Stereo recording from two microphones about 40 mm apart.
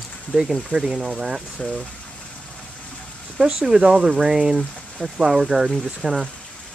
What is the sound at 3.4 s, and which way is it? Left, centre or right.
Speech, centre.